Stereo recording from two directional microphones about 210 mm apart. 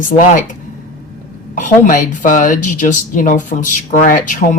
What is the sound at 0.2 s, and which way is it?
Speech, 35° left (ahead or behind).